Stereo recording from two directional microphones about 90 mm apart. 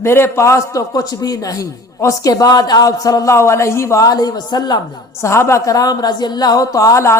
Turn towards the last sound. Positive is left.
turn(degrees=35)  # may be behind; listen again after turning